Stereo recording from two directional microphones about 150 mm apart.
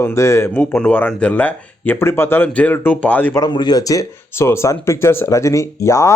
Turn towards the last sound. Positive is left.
turn(degrees=20)  # may be behind; listen again after turning